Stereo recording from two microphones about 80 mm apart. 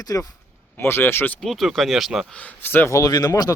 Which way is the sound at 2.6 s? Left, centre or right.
Left.